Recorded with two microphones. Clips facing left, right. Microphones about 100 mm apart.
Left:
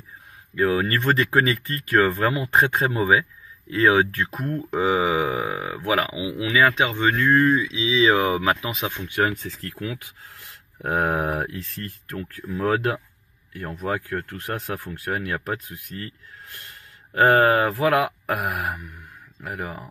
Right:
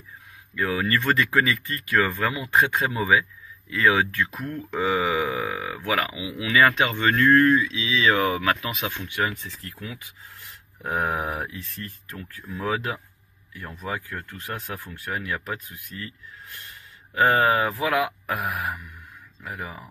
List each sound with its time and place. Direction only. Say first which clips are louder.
0.6 s speech: left 3 dB; 30° left (ahead or behind)
6.5 s speech: even; 15° left (ahead or behind)
9.0 s speech: left 5 dB; 40° left (ahead or behind)
9.4 s speech: left 6 dB; 60° left (ahead or behind)
11.0 s speech: left 3 dB; 55° left (ahead or behind)
13.6 s speech: left 5 dB; 45° left (ahead or behind)
17.1 s speech: left 3 dB; 45° left (ahead or behind)